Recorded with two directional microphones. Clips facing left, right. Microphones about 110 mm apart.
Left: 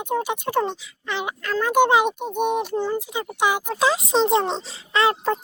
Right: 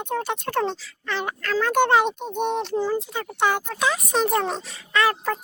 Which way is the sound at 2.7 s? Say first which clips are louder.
Even; 5° right (ahead or behind).